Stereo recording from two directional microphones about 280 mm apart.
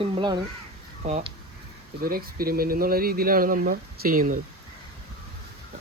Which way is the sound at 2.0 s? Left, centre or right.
Right.